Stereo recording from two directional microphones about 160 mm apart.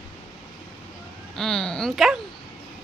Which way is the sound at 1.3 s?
5° left (ahead or behind).